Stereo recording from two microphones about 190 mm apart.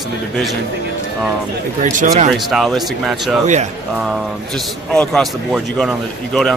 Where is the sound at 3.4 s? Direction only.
40° right (ahead or behind).